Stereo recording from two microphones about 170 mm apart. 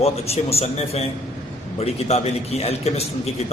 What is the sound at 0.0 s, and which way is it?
A man's voice, 35° left (ahead or behind).